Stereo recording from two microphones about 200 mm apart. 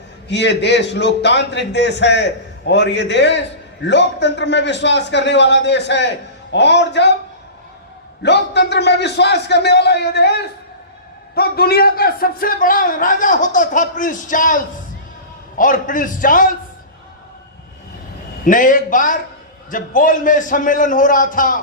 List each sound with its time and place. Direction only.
0.3 s a man's voice: 60° left (ahead or behind)
8.2 s a man's voice: 60° left (ahead or behind); by 16.5 s 40° left (ahead or behind)
18.4 s a man's voice: 40° left (ahead or behind)